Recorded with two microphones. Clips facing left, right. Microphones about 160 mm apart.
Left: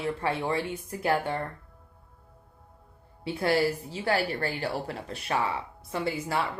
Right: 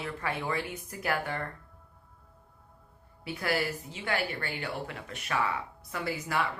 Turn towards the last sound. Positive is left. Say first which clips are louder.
# left 3 dB
turn(degrees=30)  # may be behind; listen again after turning